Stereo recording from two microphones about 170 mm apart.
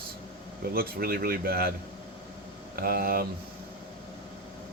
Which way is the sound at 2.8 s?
65° right (ahead or behind).